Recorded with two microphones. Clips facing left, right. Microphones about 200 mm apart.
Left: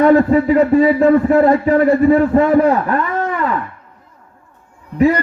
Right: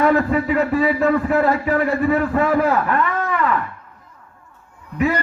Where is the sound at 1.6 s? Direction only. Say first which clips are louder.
Left 7 dB; 40° left (ahead or behind); by 2.7 s 25° left (ahead or behind).